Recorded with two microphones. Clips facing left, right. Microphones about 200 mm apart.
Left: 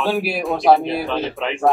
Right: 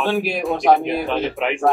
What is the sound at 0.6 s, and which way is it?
Speech, 15° right (ahead or behind).